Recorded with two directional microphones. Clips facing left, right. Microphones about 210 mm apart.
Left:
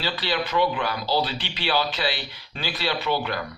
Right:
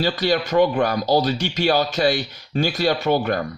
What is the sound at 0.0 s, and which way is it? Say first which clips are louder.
A man's voice: right 7 dB; 45° right (ahead or behind).